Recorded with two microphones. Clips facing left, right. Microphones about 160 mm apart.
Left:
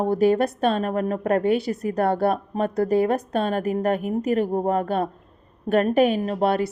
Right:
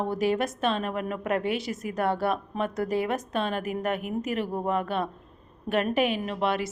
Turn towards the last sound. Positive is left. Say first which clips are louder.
# left 6 dB
turn(degrees=40)  # may be behind; listen again after turning